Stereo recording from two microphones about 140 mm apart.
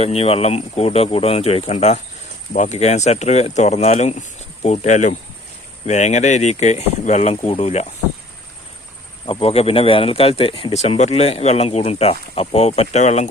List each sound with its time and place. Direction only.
0.0 s speech: 45° left (ahead or behind)
9.2 s speech: 45° left (ahead or behind)